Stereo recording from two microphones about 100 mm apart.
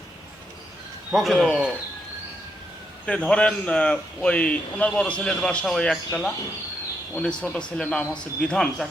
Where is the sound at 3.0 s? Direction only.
10° left (ahead or behind).